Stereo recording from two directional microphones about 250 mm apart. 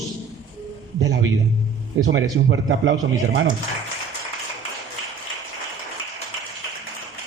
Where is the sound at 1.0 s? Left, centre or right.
Right.